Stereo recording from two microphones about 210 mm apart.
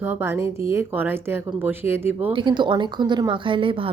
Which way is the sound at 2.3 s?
20° right (ahead or behind).